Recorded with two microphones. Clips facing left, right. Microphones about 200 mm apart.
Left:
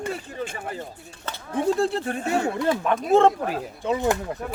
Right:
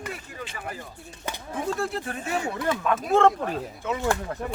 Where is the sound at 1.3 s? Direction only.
10° right (ahead or behind).